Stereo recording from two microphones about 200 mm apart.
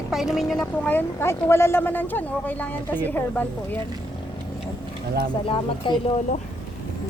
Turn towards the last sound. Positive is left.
turn(degrees=25)  # may be behind; listen again after turning